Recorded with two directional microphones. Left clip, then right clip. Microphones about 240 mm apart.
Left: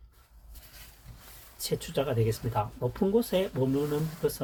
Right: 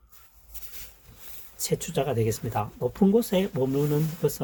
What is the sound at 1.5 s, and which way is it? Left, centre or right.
Speech, right.